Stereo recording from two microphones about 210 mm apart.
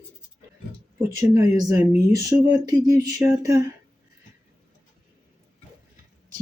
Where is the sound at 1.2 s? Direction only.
15° right (ahead or behind).